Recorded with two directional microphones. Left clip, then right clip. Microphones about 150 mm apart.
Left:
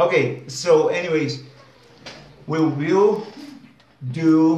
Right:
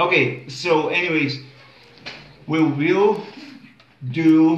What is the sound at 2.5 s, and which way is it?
Speech, 25° left (ahead or behind).